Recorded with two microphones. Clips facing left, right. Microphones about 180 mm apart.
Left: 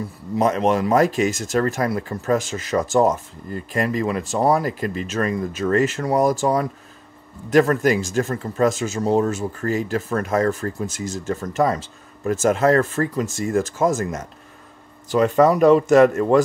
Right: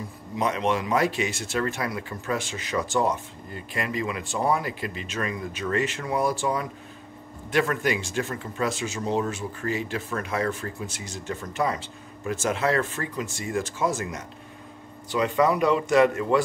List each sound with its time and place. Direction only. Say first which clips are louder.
0.4 s speech: left 6 dB; 45° left (ahead or behind)